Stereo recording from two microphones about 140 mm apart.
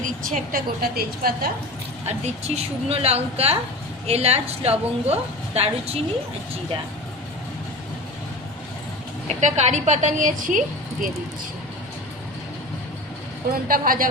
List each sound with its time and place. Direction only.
0.0 s a woman's voice: 85° right
2.0 s a woman's voice: 50° right (ahead or behind)
9.2 s a woman's voice: 55° right (ahead or behind); by 10.6 s 70° right (ahead or behind)
13.5 s a woman's voice: 90° right